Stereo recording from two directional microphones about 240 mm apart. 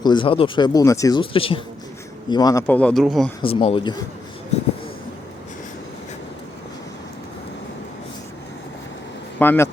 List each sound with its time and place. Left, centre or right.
0.0 s a man's voice: centre
3.4 s speech: left
9.4 s a man's voice: centre